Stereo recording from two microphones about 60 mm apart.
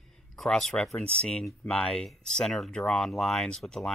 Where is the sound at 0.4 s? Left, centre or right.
Centre.